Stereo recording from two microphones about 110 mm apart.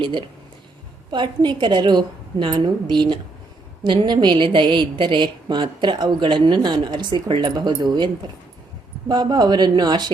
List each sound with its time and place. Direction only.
0.0 s a woman's voice: 50° right (ahead or behind)